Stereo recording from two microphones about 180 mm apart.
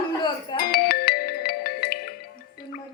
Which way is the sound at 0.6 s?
60° left (ahead or behind).